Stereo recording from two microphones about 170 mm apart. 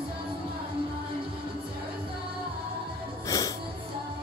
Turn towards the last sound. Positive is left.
turn(degrees=20)  # may be behind; listen again after turning